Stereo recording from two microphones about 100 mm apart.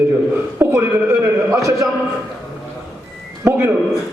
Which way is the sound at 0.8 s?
25° right (ahead or behind).